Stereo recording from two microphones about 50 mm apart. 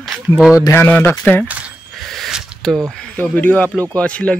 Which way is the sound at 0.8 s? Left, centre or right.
Left.